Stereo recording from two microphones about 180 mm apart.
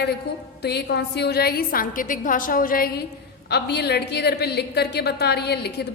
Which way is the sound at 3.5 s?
65° left (ahead or behind).